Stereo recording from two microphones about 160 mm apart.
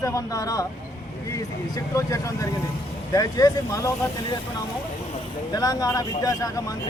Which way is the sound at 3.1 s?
25° left (ahead or behind).